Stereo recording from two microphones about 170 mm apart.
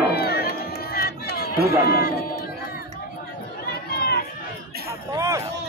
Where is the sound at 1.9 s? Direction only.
65° left (ahead or behind).